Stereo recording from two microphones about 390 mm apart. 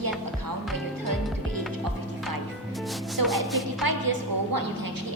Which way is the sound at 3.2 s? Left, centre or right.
Right.